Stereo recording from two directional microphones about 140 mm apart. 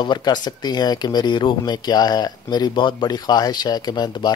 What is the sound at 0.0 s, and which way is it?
A man's voice, 30° left (ahead or behind).